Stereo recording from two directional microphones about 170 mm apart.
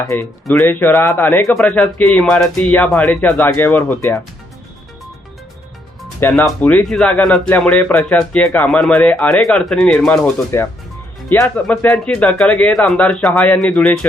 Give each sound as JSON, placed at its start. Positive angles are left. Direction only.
{"t": 0.1, "sound": "speech", "side_deg": 10}
{"t": 6.1, "sound": "speech", "side_deg": 10}
{"t": 10.5, "sound": "speech", "side_deg": 15}